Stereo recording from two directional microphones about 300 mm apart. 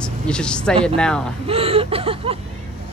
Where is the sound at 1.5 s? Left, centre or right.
Centre.